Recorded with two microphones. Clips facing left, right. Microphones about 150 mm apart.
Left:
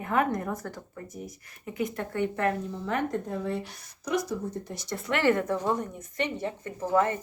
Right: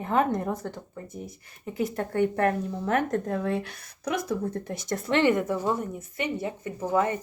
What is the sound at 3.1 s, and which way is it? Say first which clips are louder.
Speech: right 4 dB; 65° right (ahead or behind).